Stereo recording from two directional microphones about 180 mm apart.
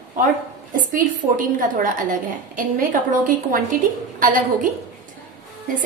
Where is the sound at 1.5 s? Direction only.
50° right (ahead or behind).